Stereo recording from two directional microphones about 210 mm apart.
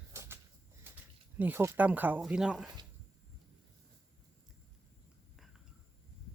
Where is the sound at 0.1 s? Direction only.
15° right (ahead or behind).